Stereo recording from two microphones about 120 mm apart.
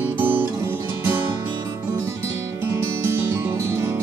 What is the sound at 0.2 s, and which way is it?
Music, 15° right (ahead or behind).